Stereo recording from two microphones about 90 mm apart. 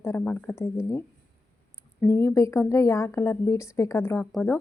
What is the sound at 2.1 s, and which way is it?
A woman's voice, 35° left (ahead or behind).